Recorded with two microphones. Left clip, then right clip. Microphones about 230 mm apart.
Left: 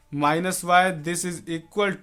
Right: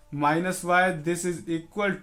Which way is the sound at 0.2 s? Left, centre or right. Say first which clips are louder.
Left 2 dB; left.